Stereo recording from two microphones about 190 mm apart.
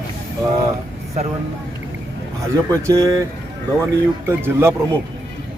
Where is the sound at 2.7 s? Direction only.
15° right (ahead or behind).